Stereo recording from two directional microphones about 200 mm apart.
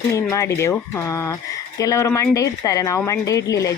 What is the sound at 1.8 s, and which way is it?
Speech, 15° left (ahead or behind).